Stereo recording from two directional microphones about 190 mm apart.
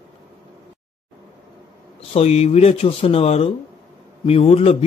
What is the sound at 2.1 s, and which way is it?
Speech, 35° left (ahead or behind).